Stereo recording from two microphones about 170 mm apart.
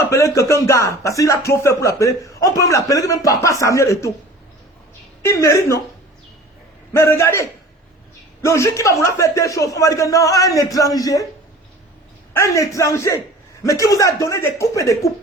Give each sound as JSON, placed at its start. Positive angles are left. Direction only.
{"t": 0.0, "sound": "speech", "side_deg": 15}
{"t": 5.2, "sound": "speech", "side_deg": 15}
{"t": 6.9, "sound": "a man's voice", "side_deg": 15}
{"t": 12.3, "sound": "a man's voice", "side_deg": 15}